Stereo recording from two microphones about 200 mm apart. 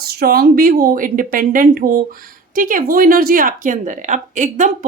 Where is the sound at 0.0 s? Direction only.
50° right (ahead or behind).